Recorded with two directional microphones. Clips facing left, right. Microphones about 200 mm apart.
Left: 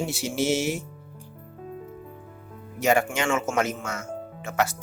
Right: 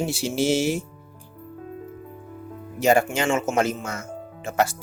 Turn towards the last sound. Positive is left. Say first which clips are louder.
# right 3 dB
turn(degrees=-30)  # may be behind; listen again after turning